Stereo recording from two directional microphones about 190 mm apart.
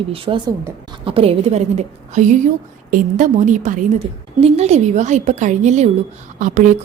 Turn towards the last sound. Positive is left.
turn(degrees=-40)  # may be behind; listen again after turning